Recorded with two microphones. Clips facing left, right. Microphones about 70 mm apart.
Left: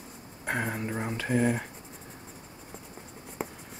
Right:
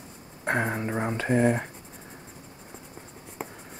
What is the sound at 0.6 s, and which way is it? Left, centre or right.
Speech, right.